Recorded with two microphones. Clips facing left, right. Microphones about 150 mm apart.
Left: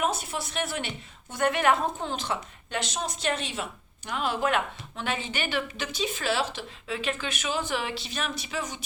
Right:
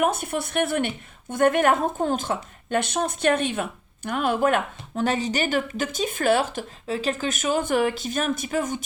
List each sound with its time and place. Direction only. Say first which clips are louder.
0.0 s a woman's voice: right 6 dB; 55° right (ahead or behind)